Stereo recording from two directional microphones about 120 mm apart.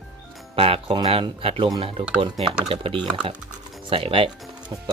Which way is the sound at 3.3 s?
10° right (ahead or behind).